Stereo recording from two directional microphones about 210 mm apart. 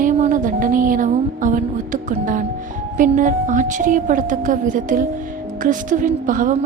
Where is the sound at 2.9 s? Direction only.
40° right (ahead or behind).